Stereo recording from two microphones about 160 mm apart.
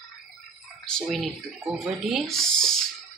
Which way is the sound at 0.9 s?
5° left (ahead or behind).